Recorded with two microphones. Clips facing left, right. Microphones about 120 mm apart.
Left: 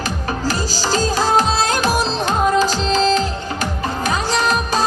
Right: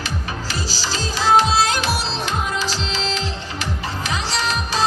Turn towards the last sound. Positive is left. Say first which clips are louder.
# left 5 dB
turn(degrees=45)  # may be behind; listen again after turning